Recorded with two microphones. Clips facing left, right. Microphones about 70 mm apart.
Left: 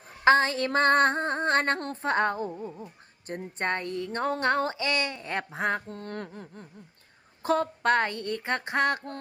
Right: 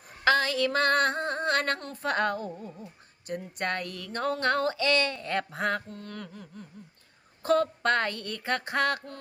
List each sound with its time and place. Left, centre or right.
0.3 s speech: left
2.8 s speech: left
5.9 s a sound: left
7.4 s speech: centre